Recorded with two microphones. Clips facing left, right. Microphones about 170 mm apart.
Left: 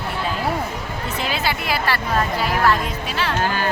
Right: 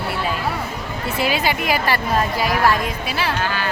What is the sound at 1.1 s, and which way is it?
A woman's voice, 10° right (ahead or behind).